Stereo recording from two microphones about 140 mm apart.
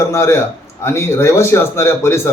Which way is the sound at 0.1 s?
20° left (ahead or behind).